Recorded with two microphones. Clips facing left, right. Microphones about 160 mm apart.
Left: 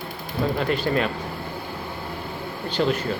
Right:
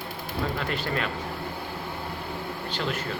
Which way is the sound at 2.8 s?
30° left (ahead or behind).